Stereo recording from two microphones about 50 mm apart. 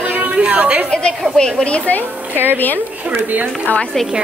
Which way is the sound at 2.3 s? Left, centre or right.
Right.